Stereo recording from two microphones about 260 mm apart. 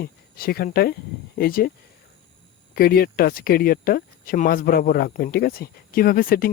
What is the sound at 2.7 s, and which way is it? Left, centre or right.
Speech, left.